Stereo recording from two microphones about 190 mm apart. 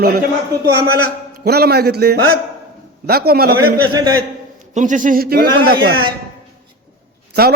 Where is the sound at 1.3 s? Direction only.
55° right (ahead or behind).